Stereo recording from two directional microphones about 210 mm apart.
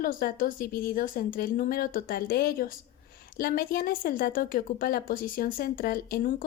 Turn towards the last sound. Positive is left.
turn(degrees=40)  # may be behind; listen again after turning